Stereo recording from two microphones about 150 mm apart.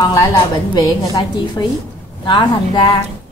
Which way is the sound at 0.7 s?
25° left (ahead or behind).